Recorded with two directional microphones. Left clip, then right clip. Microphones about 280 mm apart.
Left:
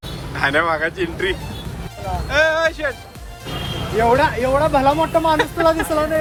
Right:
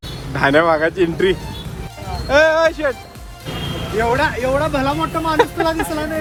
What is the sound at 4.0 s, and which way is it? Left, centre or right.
Speech, left.